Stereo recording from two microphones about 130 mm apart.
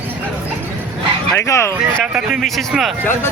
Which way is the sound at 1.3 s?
20° left (ahead or behind).